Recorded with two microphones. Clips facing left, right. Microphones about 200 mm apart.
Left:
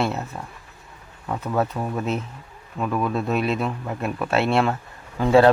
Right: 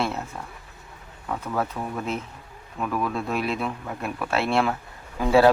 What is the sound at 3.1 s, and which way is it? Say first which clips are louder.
Speech: left 4 dB; centre (ahead or behind).